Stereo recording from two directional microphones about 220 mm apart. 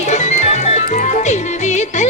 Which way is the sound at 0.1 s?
30° left (ahead or behind).